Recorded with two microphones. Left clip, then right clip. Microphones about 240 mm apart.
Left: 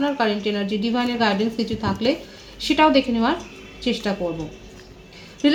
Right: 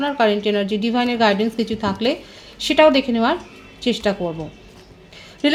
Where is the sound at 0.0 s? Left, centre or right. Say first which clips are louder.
Right 4 dB; right.